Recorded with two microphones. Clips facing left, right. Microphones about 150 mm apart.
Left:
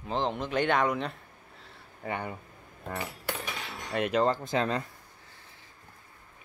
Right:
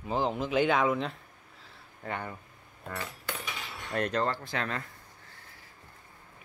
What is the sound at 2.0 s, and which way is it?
Speech, 15° left (ahead or behind).